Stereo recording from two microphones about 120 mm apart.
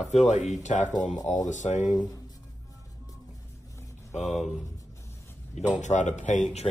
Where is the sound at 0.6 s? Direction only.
90° left.